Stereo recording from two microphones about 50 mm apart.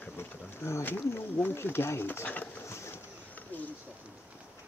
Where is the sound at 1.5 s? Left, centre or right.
Left.